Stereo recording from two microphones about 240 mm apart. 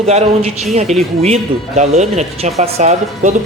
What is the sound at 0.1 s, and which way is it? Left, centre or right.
A man's voice, right.